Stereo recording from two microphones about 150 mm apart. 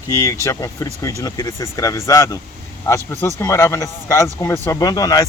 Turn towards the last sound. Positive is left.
turn(degrees=25)  # may be behind; listen again after turning